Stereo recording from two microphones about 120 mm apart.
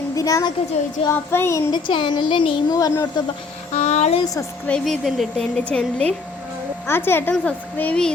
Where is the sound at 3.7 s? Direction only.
65° left (ahead or behind).